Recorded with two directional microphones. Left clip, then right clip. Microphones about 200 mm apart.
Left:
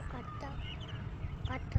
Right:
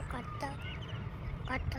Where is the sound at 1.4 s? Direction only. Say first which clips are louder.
Right 4 dB; 40° right (ahead or behind).